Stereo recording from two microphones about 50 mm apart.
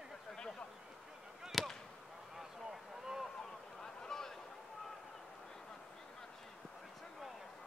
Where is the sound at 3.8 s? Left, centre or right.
Centre.